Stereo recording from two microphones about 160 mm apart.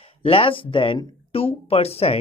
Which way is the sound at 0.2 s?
35° left (ahead or behind).